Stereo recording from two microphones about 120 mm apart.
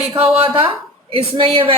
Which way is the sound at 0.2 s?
50° right (ahead or behind).